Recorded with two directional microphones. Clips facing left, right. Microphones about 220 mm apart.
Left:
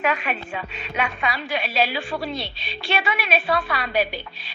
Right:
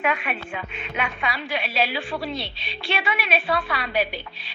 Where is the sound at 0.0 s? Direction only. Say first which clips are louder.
Left 1 dB; 40° left (ahead or behind).